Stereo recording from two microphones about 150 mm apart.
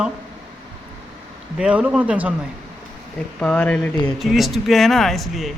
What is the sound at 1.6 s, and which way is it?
Speech, 10° right (ahead or behind).